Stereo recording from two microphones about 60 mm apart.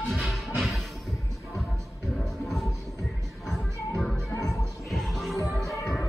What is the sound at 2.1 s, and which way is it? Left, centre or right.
Music, centre.